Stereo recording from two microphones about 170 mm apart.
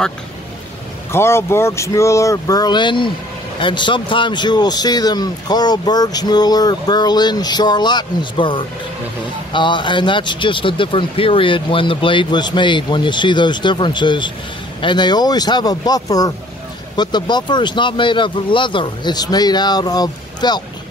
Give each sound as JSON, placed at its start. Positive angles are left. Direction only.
{"t": 1.1, "sound": "speech", "side_deg": 15}